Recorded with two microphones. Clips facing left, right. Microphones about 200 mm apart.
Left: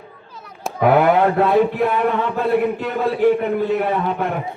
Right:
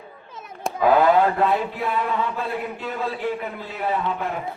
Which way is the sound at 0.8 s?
65° left (ahead or behind).